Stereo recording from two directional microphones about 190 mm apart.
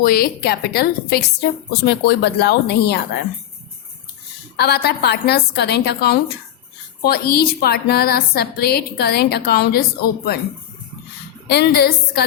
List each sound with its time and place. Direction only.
0.0 s a woman's voice: 55° left (ahead or behind)
4.5 s a woman's voice: 60° left (ahead or behind)
11.4 s a woman's voice: 55° left (ahead or behind)